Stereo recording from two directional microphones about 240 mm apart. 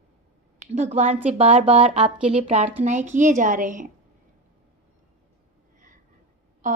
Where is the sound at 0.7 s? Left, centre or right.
Right.